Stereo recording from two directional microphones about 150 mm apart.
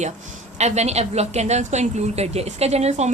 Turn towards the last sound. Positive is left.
turn(degrees=-45)  # may be behind; listen again after turning